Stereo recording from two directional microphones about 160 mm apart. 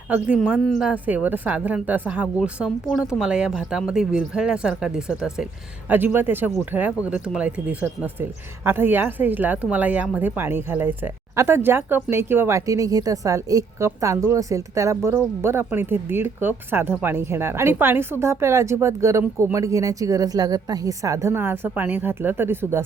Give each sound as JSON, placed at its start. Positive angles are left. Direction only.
{"t": 0.3, "sound": "speech", "side_deg": -5}